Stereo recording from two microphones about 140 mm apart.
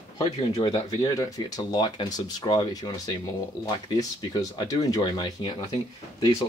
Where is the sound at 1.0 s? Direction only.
30° left (ahead or behind).